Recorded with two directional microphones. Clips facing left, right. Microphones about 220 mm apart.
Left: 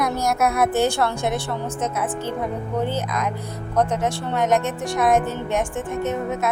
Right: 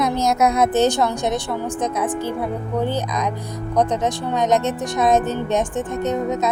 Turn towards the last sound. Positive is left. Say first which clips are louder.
# right 3 dB
turn(degrees=-20)  # may be behind; listen again after turning